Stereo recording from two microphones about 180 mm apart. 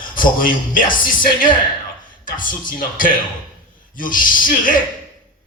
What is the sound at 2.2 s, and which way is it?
Speech, 50° left (ahead or behind).